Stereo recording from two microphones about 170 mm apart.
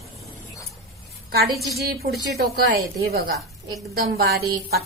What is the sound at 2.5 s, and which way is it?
A woman's voice, 70° right (ahead or behind).